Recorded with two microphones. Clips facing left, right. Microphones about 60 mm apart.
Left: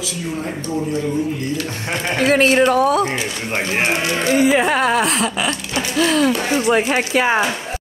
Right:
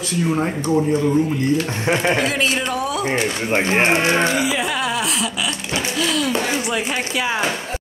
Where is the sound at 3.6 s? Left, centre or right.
Right.